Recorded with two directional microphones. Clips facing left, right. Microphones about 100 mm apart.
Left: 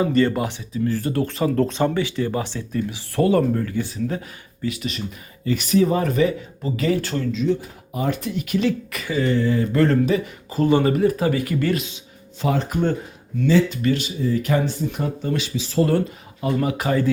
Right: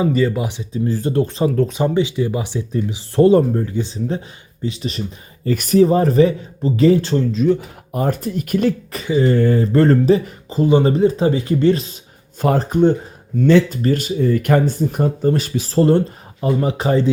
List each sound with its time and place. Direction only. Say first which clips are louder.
0.0 s speech: right 1 dB; 5° right (ahead or behind)
0.9 s speech: right 4 dB; 20° right (ahead or behind)
1.5 s speech: right 2 dB; centre (ahead or behind)
1.8 s speech: right 3 dB; 20° right (ahead or behind); by 5.0 s 35° right (ahead or behind)
5.5 s speech: right 4 dB; 45° right (ahead or behind)
5.8 s speech: right 8 dB; 35° right (ahead or behind)
7.3 s speech: right 5 dB; 55° right (ahead or behind); by 10.2 s 35° right (ahead or behind)
10.5 s speech: right 3 dB; 20° right (ahead or behind)
12.4 s speech: right 5 dB; 50° right (ahead or behind)
12.6 s speech: right 7 dB; 20° right (ahead or behind)
13.7 s speech: right 3 dB; 45° right (ahead or behind)
15.7 s speech: right 5 dB; 30° right (ahead or behind)